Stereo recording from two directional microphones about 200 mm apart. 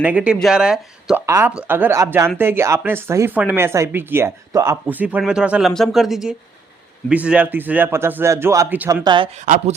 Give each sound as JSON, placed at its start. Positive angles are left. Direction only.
{"t": 0.0, "sound": "speech", "side_deg": -5}
{"t": 9.0, "sound": "speech", "side_deg": -25}